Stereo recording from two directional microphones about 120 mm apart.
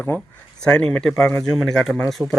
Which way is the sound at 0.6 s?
5° left (ahead or behind).